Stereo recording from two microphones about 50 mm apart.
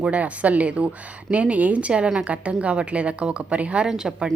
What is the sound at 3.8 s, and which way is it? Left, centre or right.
Speech, centre.